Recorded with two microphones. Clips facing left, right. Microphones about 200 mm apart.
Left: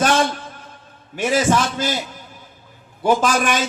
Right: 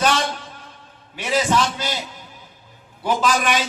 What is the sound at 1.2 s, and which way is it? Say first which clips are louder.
Speech: left 2 dB; 50° left (ahead or behind).